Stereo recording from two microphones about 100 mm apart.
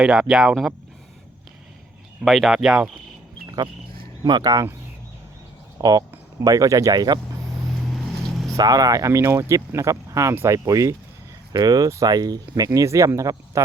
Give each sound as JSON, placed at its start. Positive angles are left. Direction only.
{"t": 0.0, "sound": "speech", "side_deg": -10}
{"t": 2.2, "sound": "speech", "side_deg": 0}
{"t": 3.4, "sound": "a sound", "side_deg": -40}
{"t": 4.2, "sound": "speech", "side_deg": -40}
{"t": 5.8, "sound": "speech", "side_deg": -35}
{"t": 7.9, "sound": "vehicle", "side_deg": 0}
{"t": 8.5, "sound": "speech", "side_deg": -40}